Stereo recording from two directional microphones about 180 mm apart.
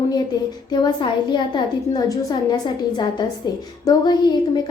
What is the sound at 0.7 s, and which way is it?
A woman's voice, 25° left (ahead or behind).